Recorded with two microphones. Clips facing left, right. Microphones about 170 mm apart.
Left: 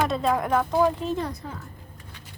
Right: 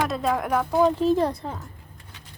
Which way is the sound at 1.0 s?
30° right (ahead or behind).